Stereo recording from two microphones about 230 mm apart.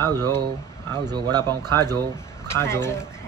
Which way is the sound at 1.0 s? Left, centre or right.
Centre.